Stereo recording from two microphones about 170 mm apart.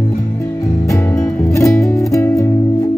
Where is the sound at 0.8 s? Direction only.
15° left (ahead or behind).